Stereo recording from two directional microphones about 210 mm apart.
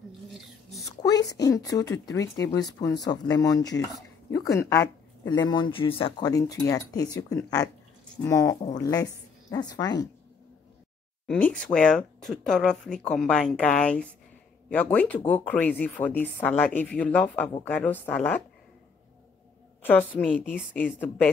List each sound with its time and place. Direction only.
0.3 s a sound: centre (ahead or behind)
1.3 s speech: 15° left (ahead or behind)
11.2 s speech: 5° left (ahead or behind)
19.8 s speech: 10° left (ahead or behind)